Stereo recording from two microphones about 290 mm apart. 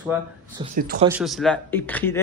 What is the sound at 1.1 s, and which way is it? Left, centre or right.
Speech, centre.